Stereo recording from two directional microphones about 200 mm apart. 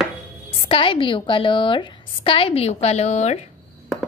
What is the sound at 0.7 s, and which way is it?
A woman's voice, 25° left (ahead or behind).